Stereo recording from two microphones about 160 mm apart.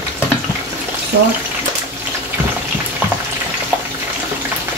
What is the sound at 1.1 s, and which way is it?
Speech, 90° right.